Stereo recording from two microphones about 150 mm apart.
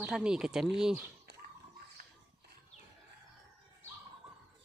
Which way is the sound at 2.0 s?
65° right (ahead or behind).